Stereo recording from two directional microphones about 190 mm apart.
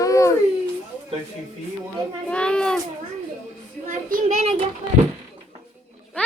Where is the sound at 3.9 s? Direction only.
40° right (ahead or behind).